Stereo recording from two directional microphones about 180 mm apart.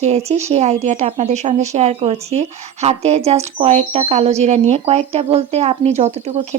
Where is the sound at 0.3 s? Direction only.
35° right (ahead or behind).